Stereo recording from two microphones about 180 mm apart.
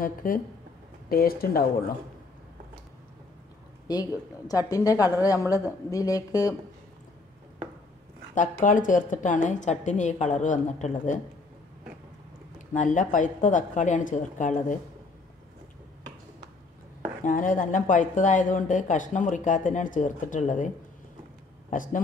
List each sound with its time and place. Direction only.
0.0 s speech: 50° left (ahead or behind)
3.8 s speech: 20° left (ahead or behind)
8.4 s speech: 45° left (ahead or behind)
12.5 s speech: 45° left (ahead or behind)
17.2 s speech: 45° left (ahead or behind)